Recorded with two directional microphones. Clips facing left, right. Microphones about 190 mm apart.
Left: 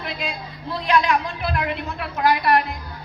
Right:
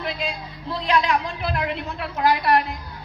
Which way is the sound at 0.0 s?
30° right (ahead or behind).